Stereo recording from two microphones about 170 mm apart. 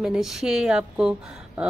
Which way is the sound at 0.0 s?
5° right (ahead or behind).